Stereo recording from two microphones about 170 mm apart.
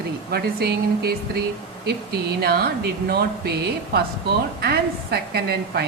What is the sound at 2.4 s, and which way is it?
Speech, 65° right (ahead or behind).